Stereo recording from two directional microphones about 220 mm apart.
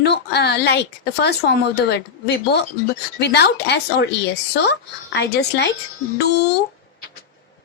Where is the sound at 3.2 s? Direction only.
50° left (ahead or behind).